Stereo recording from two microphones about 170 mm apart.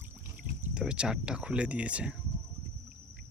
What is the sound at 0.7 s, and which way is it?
Speech, 5° right (ahead or behind).